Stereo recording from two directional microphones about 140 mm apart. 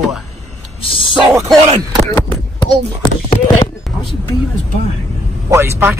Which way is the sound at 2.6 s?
45° left (ahead or behind).